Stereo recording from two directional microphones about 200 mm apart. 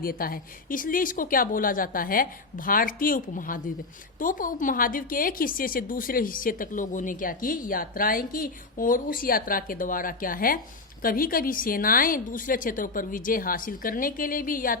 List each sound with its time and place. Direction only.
0.0 s a woman's voice: 45° left (ahead or behind)